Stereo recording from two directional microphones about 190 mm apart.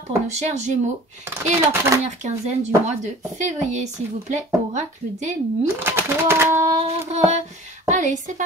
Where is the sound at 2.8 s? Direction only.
40° right (ahead or behind).